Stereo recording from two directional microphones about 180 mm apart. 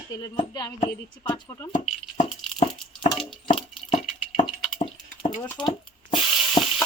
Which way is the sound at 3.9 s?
35° left (ahead or behind).